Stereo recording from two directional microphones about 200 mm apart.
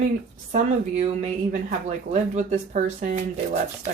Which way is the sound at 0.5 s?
35° right (ahead or behind).